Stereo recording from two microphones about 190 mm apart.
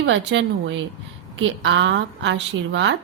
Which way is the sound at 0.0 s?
70° right (ahead or behind).